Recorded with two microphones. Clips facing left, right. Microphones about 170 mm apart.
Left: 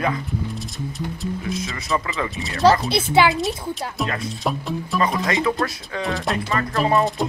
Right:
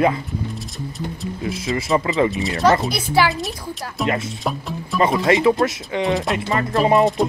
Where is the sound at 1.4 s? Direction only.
30° right (ahead or behind).